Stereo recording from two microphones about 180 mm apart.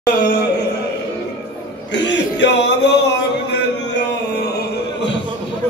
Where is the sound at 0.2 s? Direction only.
70° left (ahead or behind).